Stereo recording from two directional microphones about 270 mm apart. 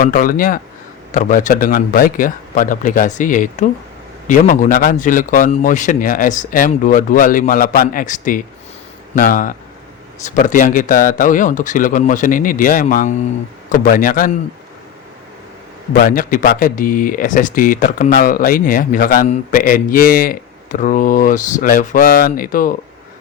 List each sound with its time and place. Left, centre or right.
0.0 s a man's voice: left
15.9 s speech: left